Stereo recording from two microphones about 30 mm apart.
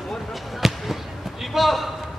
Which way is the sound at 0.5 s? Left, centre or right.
Centre.